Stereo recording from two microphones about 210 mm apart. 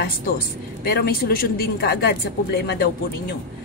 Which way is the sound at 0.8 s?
45° left (ahead or behind).